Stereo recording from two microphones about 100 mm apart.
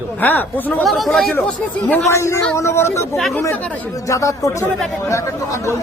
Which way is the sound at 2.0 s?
30° left (ahead or behind).